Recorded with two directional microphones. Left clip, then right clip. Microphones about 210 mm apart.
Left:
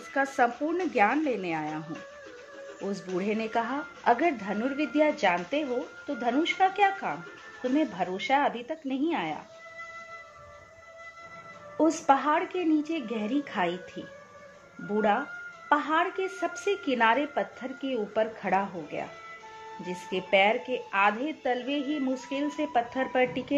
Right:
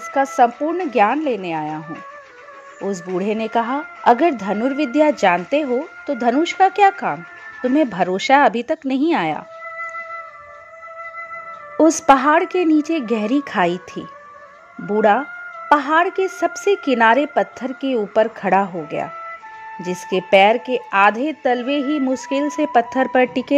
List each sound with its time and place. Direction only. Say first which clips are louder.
0.1 s speech: right 10 dB; 25° right (ahead or behind)
2.9 s speech: right 9 dB; 30° right (ahead or behind)
11.7 s a woman's voice: right 11 dB; 40° right (ahead or behind)